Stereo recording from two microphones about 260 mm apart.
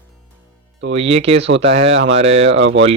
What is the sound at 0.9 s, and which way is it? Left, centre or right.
Speech, right.